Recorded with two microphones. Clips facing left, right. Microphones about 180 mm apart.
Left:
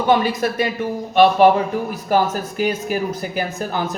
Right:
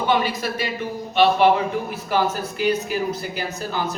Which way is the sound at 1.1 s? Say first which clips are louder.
Left 4 dB; 45° left (ahead or behind).